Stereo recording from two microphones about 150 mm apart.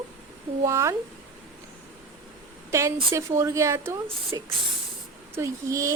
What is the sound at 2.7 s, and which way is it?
Speech, 20° right (ahead or behind).